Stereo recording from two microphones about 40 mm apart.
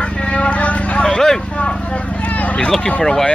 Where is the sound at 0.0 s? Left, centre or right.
Left.